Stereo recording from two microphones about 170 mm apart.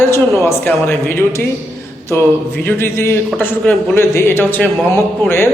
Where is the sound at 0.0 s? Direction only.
15° left (ahead or behind).